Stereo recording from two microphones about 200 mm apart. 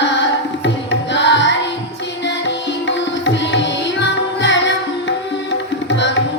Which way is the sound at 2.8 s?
60° left (ahead or behind).